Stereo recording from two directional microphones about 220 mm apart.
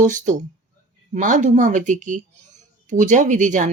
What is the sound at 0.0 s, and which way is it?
Speech, 35° right (ahead or behind).